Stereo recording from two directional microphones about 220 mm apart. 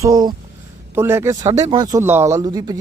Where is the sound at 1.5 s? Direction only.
30° right (ahead or behind).